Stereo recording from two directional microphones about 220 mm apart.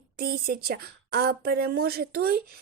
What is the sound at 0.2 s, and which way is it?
A woman's voice, 45° right (ahead or behind).